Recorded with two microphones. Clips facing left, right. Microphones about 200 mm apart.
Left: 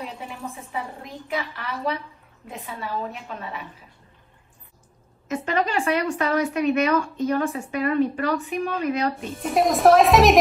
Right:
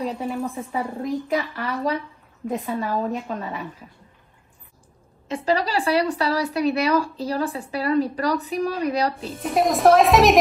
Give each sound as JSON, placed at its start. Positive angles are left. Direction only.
{"t": 0.7, "sound": "a woman's voice", "side_deg": -45}
{"t": 5.3, "sound": "a woman's voice", "side_deg": -35}
{"t": 9.4, "sound": "a woman's voice", "side_deg": 0}